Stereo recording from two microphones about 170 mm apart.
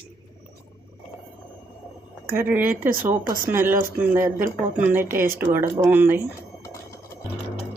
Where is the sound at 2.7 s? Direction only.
55° right (ahead or behind).